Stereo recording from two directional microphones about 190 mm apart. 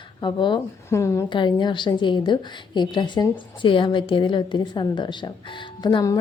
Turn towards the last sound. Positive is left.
turn(degrees=20)  # may be behind; listen again after turning